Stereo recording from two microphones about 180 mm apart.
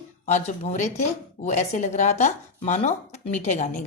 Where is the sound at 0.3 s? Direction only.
40° left (ahead or behind).